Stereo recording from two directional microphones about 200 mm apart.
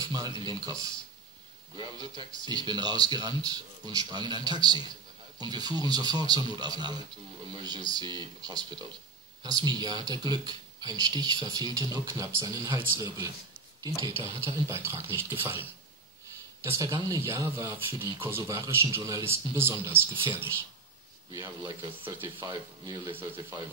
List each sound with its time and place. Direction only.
0.0 s speech: 20° right (ahead or behind)
16.6 s speech: 15° right (ahead or behind)